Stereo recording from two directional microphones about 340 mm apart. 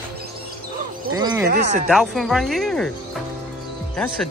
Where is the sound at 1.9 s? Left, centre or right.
Centre.